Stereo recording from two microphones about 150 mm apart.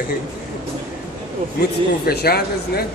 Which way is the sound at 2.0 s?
90° left.